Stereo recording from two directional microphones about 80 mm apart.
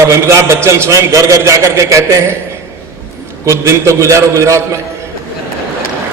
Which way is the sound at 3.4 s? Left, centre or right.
Right.